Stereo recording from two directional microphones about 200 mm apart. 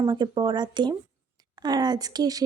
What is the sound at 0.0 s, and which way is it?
Speech, 20° right (ahead or behind).